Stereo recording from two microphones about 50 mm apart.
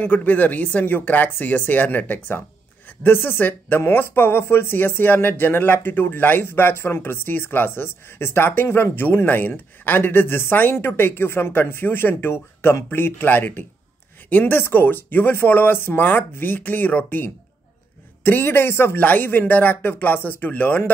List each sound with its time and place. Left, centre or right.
0.0 s speech: left
3.0 s speech: left
3.4 s speech: left
3.8 s speech: left
18.9 s speech: left